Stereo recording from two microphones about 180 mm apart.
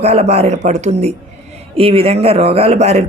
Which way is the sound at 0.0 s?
35° right (ahead or behind).